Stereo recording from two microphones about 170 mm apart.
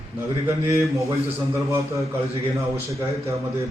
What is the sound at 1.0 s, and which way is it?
A man's voice, 15° right (ahead or behind).